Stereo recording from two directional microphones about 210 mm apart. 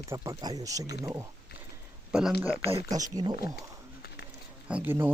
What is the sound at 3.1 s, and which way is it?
Speech, 20° right (ahead or behind).